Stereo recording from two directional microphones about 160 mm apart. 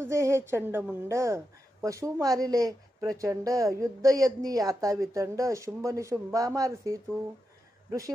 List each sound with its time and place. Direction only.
0.0 s a woman's voice: 15° right (ahead or behind)